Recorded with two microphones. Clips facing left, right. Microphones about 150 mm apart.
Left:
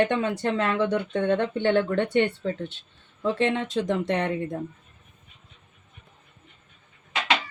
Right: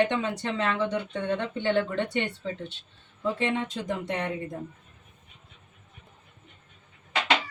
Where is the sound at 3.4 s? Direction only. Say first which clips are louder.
Left 4 dB; 75° left (ahead or behind).